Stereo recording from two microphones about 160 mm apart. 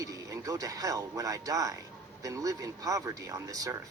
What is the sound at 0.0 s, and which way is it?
A man's voice, 20° right (ahead or behind).